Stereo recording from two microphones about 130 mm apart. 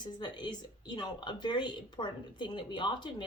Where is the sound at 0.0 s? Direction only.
35° left (ahead or behind).